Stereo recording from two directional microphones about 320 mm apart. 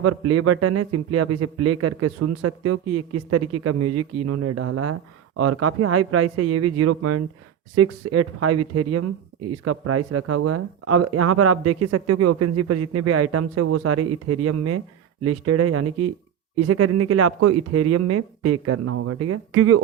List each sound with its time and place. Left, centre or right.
0.0 s speech: right